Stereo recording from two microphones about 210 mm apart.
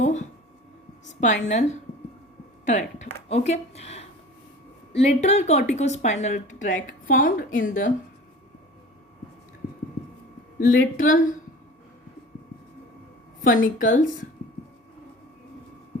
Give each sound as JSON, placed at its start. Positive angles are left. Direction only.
{"t": 0.0, "sound": "a sound", "side_deg": 35}
{"t": 1.5, "sound": "a woman's voice", "side_deg": 35}
{"t": 10.6, "sound": "a woman's voice", "side_deg": 40}
{"t": 13.4, "sound": "a woman's voice", "side_deg": 40}